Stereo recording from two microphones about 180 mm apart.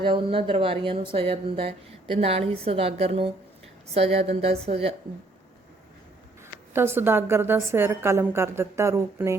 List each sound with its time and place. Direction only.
0.0 s a woman's voice: 30° right (ahead or behind)
6.7 s a woman's voice: 15° right (ahead or behind)